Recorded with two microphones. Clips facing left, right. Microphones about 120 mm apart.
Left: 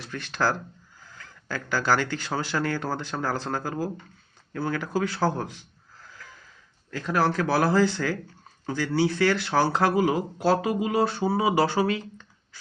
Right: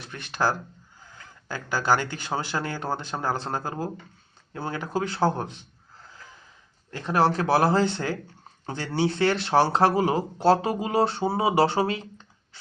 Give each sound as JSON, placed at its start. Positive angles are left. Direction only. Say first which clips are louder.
{"t": 0.0, "sound": "a man's voice", "louder": "even", "side_deg": -20}